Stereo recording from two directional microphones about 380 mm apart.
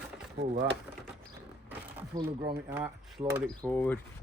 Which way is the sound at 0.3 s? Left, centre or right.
Right.